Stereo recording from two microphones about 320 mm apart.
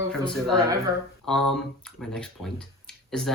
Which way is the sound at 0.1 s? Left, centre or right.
Centre.